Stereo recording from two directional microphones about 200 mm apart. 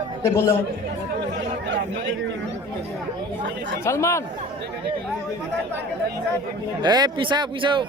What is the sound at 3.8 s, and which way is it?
Speech, 15° left (ahead or behind).